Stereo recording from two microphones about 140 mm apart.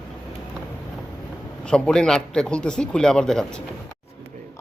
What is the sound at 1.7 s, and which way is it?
A man's voice, 5° left (ahead or behind).